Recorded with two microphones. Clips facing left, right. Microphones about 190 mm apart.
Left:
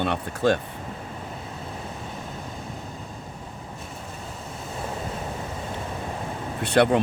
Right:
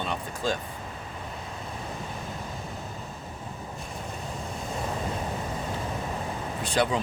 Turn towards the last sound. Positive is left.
turn(degrees=65)  # may be behind; listen again after turning